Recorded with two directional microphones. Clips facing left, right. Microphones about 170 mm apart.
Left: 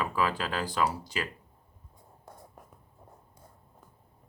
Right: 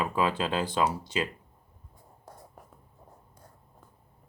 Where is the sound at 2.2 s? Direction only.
Centre (ahead or behind).